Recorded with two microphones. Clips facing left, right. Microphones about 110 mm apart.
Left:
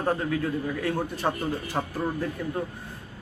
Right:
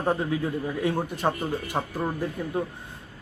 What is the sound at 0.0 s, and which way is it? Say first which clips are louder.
A man's voice: right 1 dB; 15° right (ahead or behind).